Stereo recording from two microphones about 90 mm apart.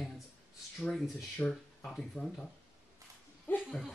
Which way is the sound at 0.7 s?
Centre (ahead or behind).